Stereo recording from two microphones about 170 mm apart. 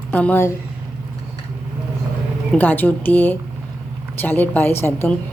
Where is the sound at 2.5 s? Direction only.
10° left (ahead or behind).